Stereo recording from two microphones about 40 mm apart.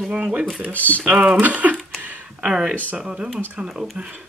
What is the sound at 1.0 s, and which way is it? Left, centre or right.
Speech, right.